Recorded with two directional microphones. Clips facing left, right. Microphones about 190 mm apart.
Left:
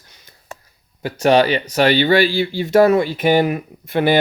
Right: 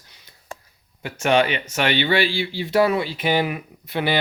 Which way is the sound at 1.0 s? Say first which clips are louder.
Left 5 dB; 35° left (ahead or behind).